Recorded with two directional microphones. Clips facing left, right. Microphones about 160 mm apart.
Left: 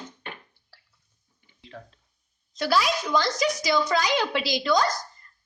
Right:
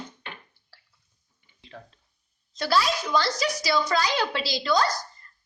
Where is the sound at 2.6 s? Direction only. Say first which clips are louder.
Left 1 dB; 15° left (ahead or behind).